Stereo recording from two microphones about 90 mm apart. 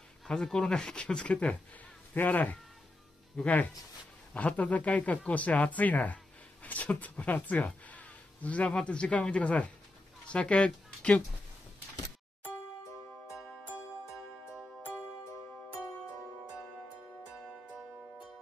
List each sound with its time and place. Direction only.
0.3 s speech: 5° left (ahead or behind)